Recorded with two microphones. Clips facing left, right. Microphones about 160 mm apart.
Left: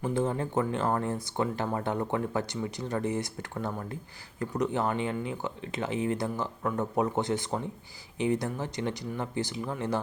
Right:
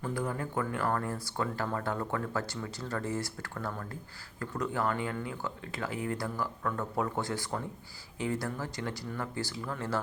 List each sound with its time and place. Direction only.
0.0 s speech: 25° left (ahead or behind)